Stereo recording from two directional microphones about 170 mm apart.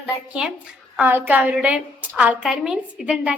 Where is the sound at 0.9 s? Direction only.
10° right (ahead or behind).